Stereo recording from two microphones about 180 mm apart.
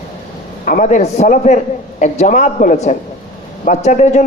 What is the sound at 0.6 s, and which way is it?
A man's voice, 45° left (ahead or behind).